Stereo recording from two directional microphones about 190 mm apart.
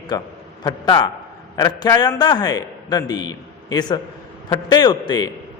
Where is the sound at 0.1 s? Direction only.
20° left (ahead or behind).